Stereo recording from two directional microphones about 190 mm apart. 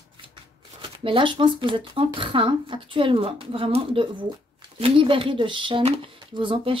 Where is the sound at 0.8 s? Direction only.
25° right (ahead or behind).